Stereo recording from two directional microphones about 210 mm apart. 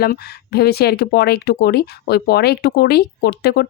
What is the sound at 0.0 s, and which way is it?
Speech, 50° left (ahead or behind).